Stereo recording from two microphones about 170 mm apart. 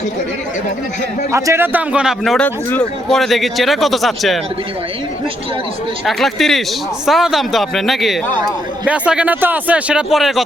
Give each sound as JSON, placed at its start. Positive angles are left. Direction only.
{"t": 1.3, "sound": "speech", "side_deg": -20}
{"t": 6.1, "sound": "speech", "side_deg": 0}